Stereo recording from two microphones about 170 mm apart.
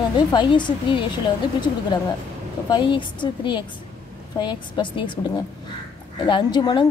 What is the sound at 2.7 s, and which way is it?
A woman's voice, 30° left (ahead or behind).